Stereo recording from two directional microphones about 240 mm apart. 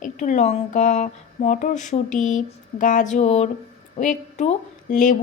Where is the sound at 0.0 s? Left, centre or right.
Left.